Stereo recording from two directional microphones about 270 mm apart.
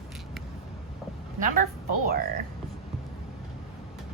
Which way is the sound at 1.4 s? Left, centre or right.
Right.